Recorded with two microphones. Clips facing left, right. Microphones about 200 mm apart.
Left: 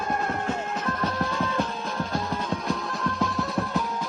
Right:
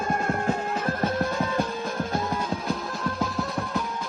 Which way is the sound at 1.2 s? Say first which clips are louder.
Right 1 dB; 50° right (ahead or behind).